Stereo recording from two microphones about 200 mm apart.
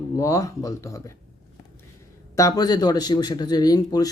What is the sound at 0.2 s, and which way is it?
Speech, 15° left (ahead or behind).